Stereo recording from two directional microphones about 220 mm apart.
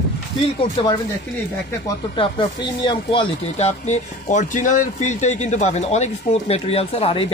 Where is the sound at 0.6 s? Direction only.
25° left (ahead or behind).